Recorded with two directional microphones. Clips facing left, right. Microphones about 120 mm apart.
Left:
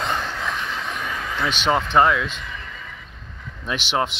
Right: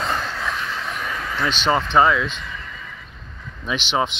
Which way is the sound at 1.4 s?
10° left (ahead or behind).